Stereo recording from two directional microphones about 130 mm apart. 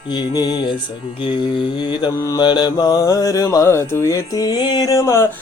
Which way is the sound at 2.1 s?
25° left (ahead or behind).